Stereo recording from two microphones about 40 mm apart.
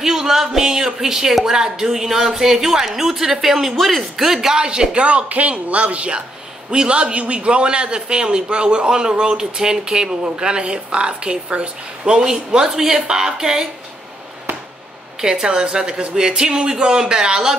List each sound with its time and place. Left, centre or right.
0.0 s speech: centre
5.0 s a man's voice: right; by 13.7 s centre
15.2 s a man's voice: centre